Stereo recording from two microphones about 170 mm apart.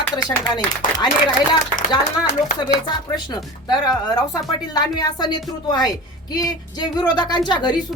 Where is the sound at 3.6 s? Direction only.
25° left (ahead or behind).